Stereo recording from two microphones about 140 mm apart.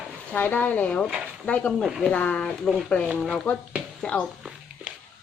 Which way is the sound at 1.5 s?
5° left (ahead or behind).